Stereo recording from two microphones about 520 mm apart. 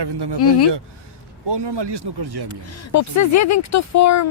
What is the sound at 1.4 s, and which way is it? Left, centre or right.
Speech, right.